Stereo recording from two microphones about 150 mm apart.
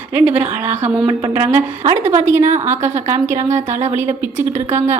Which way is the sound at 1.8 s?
50° right (ahead or behind).